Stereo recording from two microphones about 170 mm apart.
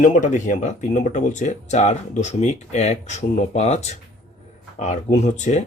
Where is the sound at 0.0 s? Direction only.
50° left (ahead or behind).